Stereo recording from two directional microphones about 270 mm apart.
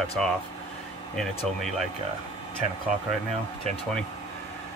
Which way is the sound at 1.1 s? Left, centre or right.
Centre.